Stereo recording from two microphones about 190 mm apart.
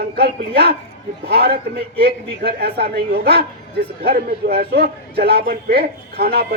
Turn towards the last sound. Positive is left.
turn(degrees=-55)  # may be behind; listen again after turning